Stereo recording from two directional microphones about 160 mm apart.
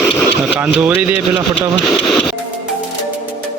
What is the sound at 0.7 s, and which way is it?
Speech, 10° right (ahead or behind).